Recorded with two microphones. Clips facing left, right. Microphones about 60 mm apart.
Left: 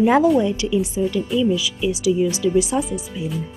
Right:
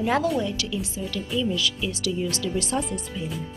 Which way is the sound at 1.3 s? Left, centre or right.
Centre.